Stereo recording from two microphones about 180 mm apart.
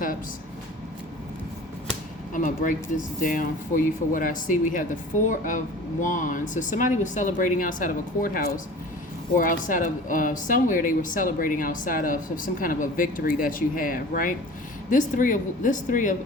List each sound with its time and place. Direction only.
2.3 s speech: 45° left (ahead or behind)